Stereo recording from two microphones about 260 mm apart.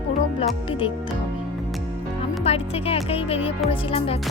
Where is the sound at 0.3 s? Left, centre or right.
Left.